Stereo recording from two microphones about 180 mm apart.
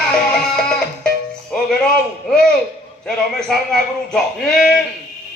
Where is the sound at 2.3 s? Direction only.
5° left (ahead or behind).